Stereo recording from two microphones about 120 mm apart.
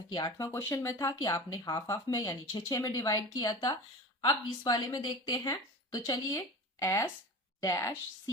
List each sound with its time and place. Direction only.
0.1 s a woman's voice: 30° left (ahead or behind)